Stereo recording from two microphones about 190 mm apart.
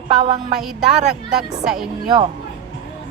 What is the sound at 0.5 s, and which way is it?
A woman's voice, centre (ahead or behind).